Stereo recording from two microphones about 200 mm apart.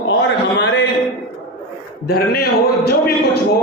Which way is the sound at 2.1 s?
50° left (ahead or behind).